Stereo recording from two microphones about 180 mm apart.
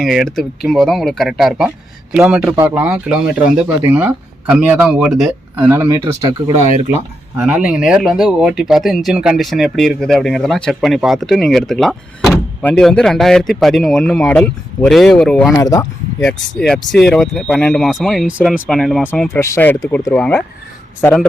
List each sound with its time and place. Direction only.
0.0 s speech: centre (ahead or behind); by 6.3 s 20° right (ahead or behind)
7.3 s speech: 5° right (ahead or behind)
12.2 s door: 15° left (ahead or behind)
12.7 s speech: 5° left (ahead or behind)
15.5 s speech: 20° left (ahead or behind)
16.2 s speech: 5° left (ahead or behind)